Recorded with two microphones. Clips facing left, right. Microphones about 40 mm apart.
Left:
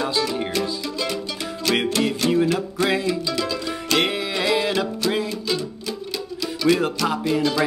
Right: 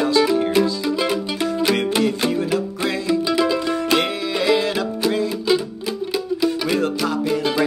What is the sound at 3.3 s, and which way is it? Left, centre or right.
Music, centre.